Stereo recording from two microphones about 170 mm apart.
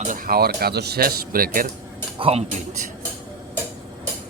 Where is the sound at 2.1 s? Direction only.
35° right (ahead or behind).